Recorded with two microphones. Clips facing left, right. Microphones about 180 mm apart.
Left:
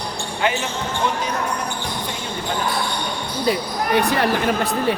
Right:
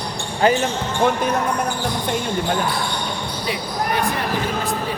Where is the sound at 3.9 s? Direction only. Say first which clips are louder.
Left 6 dB; 70° left (ahead or behind).